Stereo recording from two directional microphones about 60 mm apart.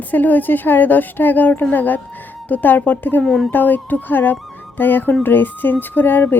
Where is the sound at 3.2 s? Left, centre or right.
Centre.